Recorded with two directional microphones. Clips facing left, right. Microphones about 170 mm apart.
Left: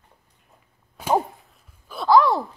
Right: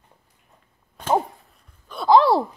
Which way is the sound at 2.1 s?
25° right (ahead or behind).